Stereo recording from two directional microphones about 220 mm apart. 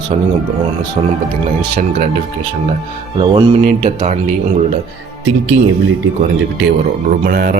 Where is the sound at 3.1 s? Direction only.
25° right (ahead or behind).